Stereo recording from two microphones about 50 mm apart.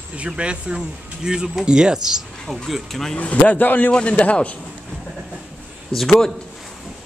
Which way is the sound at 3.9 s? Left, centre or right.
Left.